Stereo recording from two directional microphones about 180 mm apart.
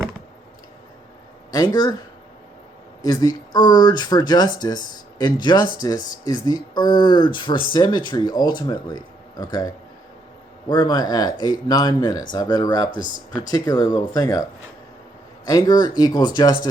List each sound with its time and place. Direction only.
1.5 s speech: 20° left (ahead or behind)
3.0 s speech: 20° left (ahead or behind)
15.4 s speech: 20° left (ahead or behind)